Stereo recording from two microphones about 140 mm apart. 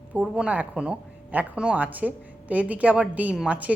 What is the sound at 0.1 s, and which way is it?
A woman's voice, 5° right (ahead or behind).